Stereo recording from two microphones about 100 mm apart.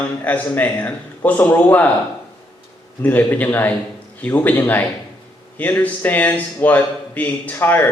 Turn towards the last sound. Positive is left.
turn(degrees=25)  # may be behind; listen again after turning